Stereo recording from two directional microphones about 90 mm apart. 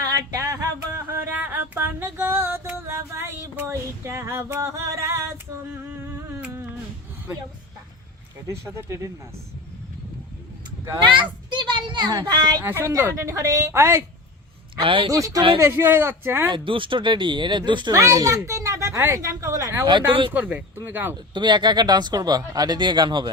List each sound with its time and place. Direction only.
0.1 s music: 40° right (ahead or behind)
8.4 s a woman's voice: 30° right (ahead or behind)
11.1 s children playing: 60° right (ahead or behind)
12.3 s speech: 50° right (ahead or behind)
12.6 s a woman's voice: 25° right (ahead or behind)
14.8 s speech: 75° right (ahead or behind)
15.1 s a woman's voice: 40° right (ahead or behind)
15.5 s speech: 30° right (ahead or behind)
16.5 s speech: 70° right (ahead or behind)
17.9 s speech: 35° right (ahead or behind)
19.8 s speech: 60° right (ahead or behind)
20.3 s speech: 20° right (ahead or behind)
21.3 s speech: 55° right (ahead or behind)